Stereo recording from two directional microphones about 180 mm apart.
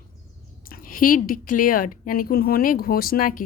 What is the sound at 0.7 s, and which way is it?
A woman's voice, 50° left (ahead or behind).